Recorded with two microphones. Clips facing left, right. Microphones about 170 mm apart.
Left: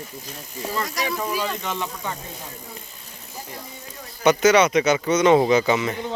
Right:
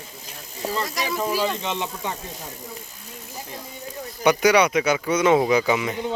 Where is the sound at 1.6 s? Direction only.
20° right (ahead or behind).